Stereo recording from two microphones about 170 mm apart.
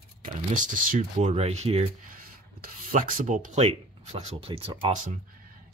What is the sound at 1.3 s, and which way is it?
Speech, 40° right (ahead or behind).